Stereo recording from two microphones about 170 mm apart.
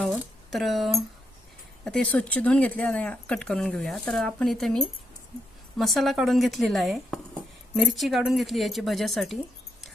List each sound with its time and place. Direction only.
0.0 s speech: centre (ahead or behind)